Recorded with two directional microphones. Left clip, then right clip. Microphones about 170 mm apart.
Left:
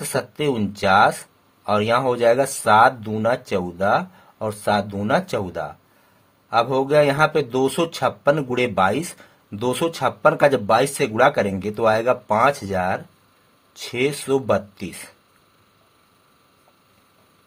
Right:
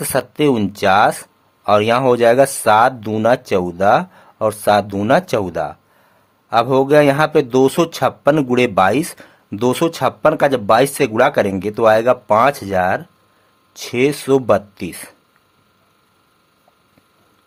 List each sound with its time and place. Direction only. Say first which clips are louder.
0.0 s speech: right 7 dB; 40° right (ahead or behind)